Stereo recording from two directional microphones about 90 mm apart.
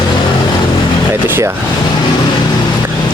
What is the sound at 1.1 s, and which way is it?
Speech, 25° right (ahead or behind).